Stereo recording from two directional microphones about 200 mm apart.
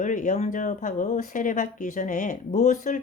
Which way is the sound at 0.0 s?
40° left (ahead or behind).